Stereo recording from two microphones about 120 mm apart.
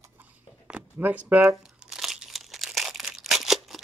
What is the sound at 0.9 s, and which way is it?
Speech, 15° right (ahead or behind).